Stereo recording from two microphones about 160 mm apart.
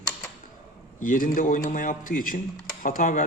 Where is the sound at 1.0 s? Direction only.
55° left (ahead or behind).